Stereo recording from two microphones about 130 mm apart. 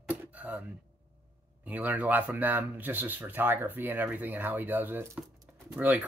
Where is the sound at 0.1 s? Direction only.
10° right (ahead or behind).